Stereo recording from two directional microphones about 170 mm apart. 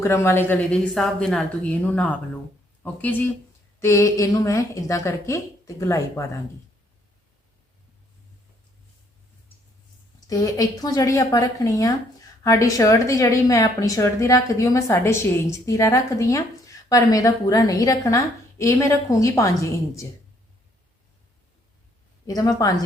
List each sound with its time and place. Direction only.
0.0 s a woman's voice: 15° left (ahead or behind)
10.2 s a woman's voice: 20° left (ahead or behind)
22.3 s a woman's voice: 20° left (ahead or behind)